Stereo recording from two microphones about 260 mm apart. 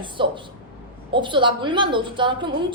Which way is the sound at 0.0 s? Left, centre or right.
Centre.